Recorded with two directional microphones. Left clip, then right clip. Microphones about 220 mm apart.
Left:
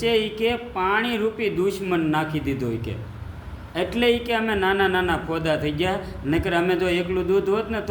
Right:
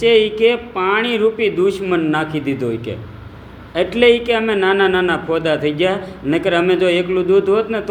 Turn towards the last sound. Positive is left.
turn(degrees=15)  # may be behind; listen again after turning